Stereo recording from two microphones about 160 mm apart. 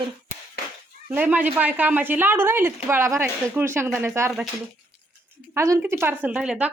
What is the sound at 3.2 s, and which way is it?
Speech, 5° right (ahead or behind).